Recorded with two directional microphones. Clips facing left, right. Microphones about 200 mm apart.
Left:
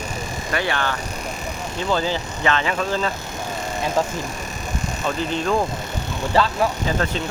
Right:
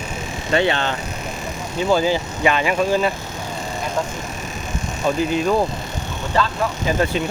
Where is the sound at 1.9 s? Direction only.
10° right (ahead or behind).